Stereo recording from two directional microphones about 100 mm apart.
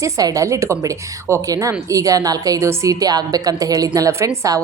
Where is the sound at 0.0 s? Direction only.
35° right (ahead or behind).